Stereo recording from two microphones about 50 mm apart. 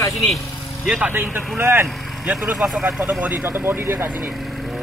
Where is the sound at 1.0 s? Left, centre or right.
Right.